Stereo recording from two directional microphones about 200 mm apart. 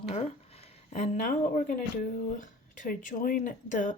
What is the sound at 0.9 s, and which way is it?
Speech, 35° left (ahead or behind).